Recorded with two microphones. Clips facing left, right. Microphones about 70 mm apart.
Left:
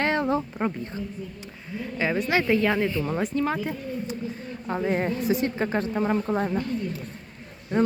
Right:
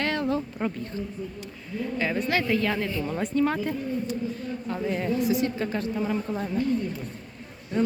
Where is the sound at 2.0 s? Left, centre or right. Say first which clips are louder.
Left 3 dB; centre.